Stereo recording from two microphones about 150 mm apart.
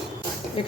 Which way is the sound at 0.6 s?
35° left (ahead or behind).